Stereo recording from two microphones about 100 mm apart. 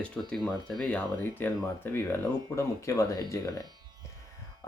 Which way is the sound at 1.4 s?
20° left (ahead or behind).